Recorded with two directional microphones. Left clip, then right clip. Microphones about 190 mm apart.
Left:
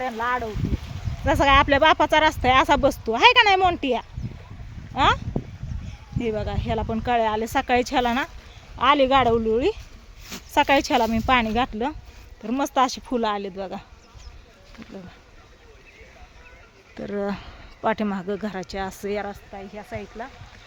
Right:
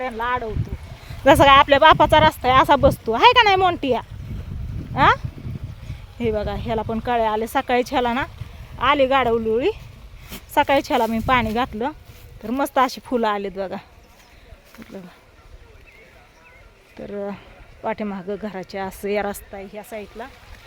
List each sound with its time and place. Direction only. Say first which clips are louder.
0.2 s speech: right 2 dB; 10° right (ahead or behind)
1.4 s speech: right 3 dB; 30° right (ahead or behind)
16.9 s speech: left 1 dB; 5° left (ahead or behind); by 20.3 s 10° right (ahead or behind)